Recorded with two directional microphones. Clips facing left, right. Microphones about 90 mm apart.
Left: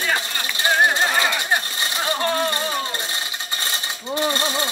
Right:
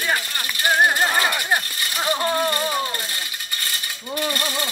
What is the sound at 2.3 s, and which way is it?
Coin, 20° left (ahead or behind).